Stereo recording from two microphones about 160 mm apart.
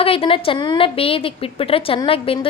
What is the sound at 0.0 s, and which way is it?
A woman's voice, 35° left (ahead or behind).